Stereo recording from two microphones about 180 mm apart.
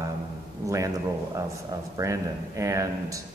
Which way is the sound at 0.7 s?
15° right (ahead or behind).